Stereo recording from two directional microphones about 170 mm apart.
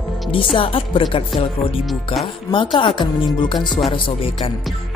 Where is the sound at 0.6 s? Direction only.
30° left (ahead or behind).